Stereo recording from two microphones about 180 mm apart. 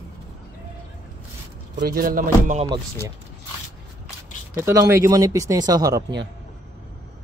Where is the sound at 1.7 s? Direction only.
55° right (ahead or behind).